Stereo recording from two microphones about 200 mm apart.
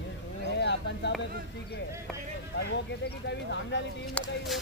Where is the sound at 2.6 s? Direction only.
60° left (ahead or behind).